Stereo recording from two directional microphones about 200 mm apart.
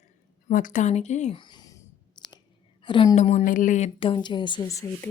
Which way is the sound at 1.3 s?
20° left (ahead or behind).